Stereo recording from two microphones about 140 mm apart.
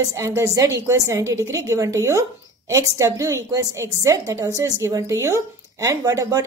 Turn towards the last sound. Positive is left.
turn(degrees=-20)  # may be behind; listen again after turning